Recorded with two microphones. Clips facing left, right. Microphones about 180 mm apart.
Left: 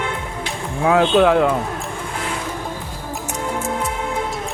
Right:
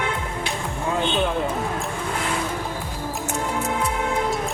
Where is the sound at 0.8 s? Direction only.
85° left.